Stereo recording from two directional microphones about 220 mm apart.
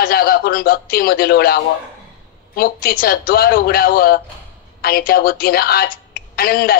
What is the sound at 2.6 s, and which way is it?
A woman's voice, 40° left (ahead or behind).